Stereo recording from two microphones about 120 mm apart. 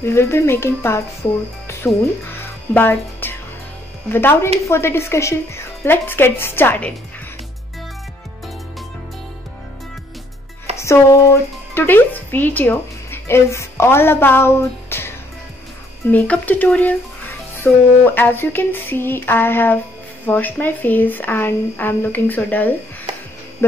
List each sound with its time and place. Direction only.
0.0 s a woman's voice: 20° left (ahead or behind)
1.7 s music: 20° left (ahead or behind)
4.1 s a woman's voice: 20° left (ahead or behind)
10.8 s speech: 25° left (ahead or behind)